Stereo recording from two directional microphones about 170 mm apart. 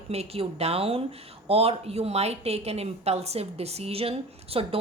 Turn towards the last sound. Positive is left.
turn(degrees=-35)  # may be behind; listen again after turning